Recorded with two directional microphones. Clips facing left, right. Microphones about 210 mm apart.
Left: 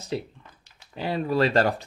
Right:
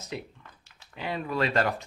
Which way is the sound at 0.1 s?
35° left (ahead or behind).